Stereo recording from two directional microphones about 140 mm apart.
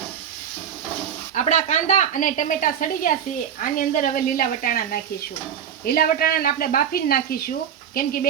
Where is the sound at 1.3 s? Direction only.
60° left (ahead or behind).